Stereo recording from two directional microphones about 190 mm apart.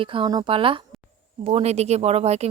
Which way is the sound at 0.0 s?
25° right (ahead or behind).